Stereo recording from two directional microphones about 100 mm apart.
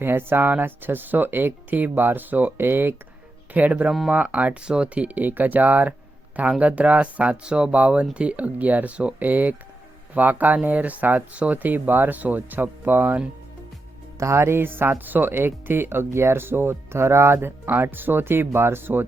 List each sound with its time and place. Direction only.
0.0 s speech: 20° right (ahead or behind)